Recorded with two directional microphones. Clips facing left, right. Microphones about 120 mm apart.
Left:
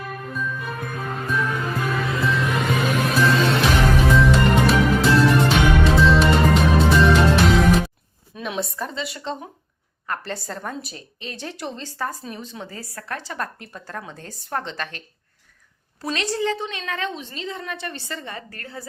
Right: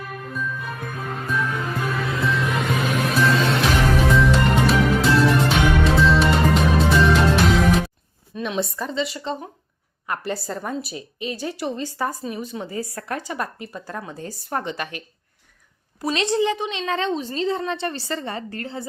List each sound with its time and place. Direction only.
0.1 s music: centre (ahead or behind)
8.4 s a woman's voice: centre (ahead or behind); by 18.9 s 25° right (ahead or behind)